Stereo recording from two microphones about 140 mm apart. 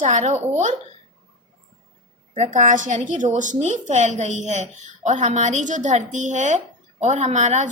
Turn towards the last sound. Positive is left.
turn(degrees=-55)  # may be behind; listen again after turning